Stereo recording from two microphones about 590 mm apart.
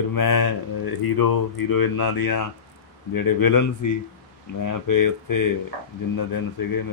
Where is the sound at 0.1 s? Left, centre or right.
Left.